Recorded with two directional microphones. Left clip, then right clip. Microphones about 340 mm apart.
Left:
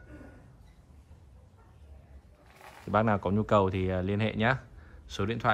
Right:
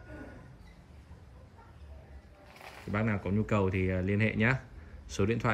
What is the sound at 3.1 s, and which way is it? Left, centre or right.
Speech, centre.